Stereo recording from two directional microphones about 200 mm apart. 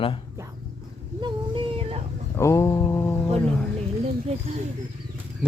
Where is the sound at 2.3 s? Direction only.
15° left (ahead or behind).